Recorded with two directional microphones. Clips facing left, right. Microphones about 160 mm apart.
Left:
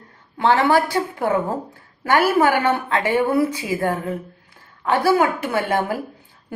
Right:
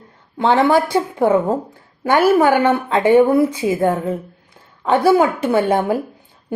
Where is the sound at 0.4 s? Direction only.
20° right (ahead or behind).